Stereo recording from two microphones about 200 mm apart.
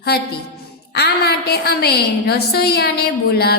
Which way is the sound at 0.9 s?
55° left (ahead or behind).